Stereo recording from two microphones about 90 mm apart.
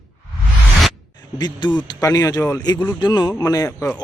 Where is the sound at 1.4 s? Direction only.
50° left (ahead or behind).